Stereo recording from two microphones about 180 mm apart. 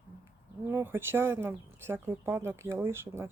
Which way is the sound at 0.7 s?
10° right (ahead or behind).